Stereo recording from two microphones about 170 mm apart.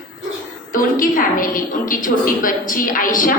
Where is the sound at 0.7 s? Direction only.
55° left (ahead or behind).